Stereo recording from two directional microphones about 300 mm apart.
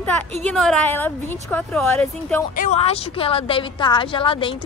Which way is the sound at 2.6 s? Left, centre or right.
Left.